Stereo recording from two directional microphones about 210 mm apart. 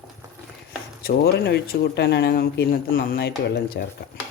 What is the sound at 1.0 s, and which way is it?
Speech, 45° left (ahead or behind).